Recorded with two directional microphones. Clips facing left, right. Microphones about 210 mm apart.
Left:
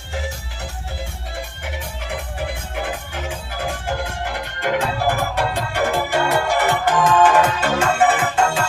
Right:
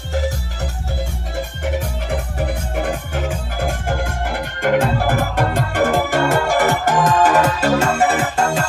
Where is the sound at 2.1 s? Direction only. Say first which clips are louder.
Right 3 dB; 45° right (ahead or behind).